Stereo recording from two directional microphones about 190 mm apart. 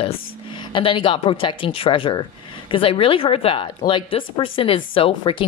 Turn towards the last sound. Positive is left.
turn(degrees=30)  # may be behind; listen again after turning